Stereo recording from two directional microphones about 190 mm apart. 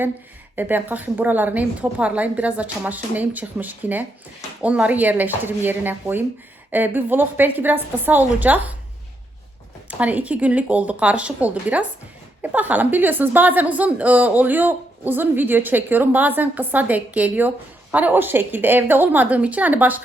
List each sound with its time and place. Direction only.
0.5 s a woman's voice: 10° right (ahead or behind)
10.0 s a woman's voice: 5° right (ahead or behind)